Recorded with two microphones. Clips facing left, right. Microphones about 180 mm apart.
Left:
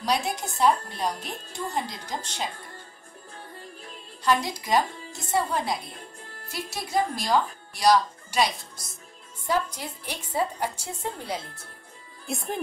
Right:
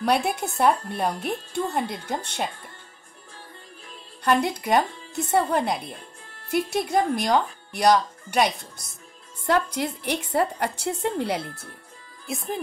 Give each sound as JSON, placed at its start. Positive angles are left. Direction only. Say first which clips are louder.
{"t": 0.0, "sound": "a woman's voice", "louder": "right 4 dB", "side_deg": -60}
{"t": 4.2, "sound": "a woman's voice", "louder": "right 3 dB", "side_deg": -60}
{"t": 12.3, "sound": "speech", "louder": "right 1 dB", "side_deg": 0}